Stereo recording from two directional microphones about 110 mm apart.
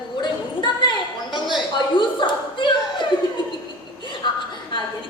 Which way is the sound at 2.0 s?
45° left (ahead or behind).